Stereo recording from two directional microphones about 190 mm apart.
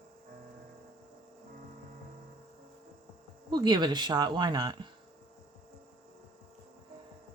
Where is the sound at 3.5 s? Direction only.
20° right (ahead or behind).